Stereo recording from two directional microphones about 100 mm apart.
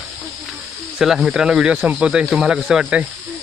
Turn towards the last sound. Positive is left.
turn(degrees=-10)  # may be behind; listen again after turning